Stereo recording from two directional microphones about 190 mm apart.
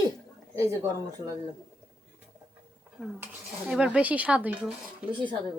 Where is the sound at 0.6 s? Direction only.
15° right (ahead or behind).